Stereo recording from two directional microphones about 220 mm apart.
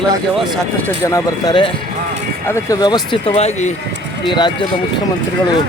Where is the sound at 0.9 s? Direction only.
15° left (ahead or behind).